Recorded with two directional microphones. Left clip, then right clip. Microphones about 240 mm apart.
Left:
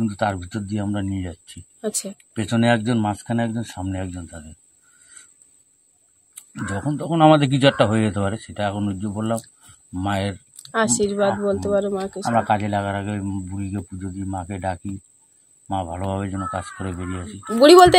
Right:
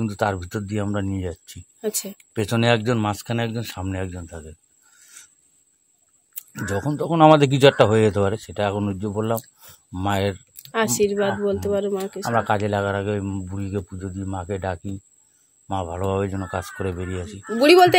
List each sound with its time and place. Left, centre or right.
0.0 s speech: right
1.8 s speech: centre
2.1 s speech: right
6.3 s speech: right
10.5 s speech: centre
12.4 s speech: right
17.5 s speech: centre